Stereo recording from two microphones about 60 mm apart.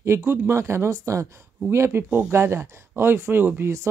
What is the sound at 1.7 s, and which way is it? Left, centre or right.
Speech, right.